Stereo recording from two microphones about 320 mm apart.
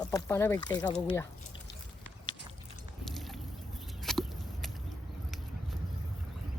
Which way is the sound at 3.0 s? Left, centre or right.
Centre.